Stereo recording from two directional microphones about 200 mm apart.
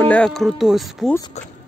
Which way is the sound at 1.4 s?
35° left (ahead or behind).